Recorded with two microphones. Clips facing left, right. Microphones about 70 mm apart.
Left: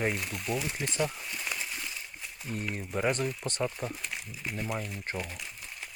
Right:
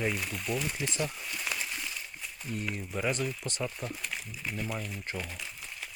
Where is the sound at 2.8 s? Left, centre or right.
Left.